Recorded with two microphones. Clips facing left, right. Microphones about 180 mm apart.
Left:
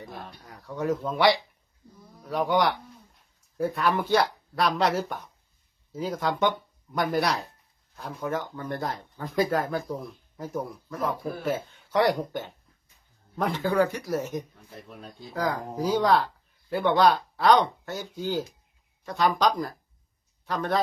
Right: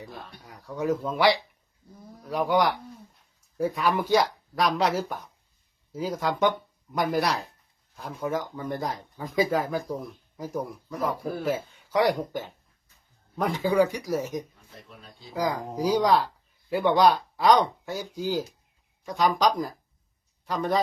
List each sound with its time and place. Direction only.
0.0 s a man's voice: centre (ahead or behind)
16.1 s a sound: 5° right (ahead or behind)
16.8 s speech: 10° right (ahead or behind)